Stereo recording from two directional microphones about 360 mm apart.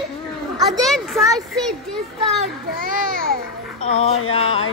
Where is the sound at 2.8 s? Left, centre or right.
Right.